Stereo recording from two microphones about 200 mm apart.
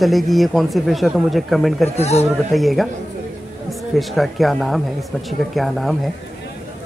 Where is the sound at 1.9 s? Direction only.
30° left (ahead or behind).